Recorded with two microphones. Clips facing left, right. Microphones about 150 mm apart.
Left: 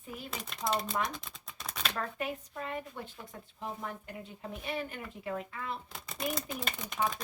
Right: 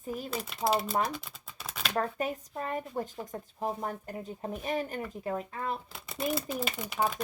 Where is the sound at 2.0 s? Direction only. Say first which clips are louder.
Right 8 dB; 40° right (ahead or behind).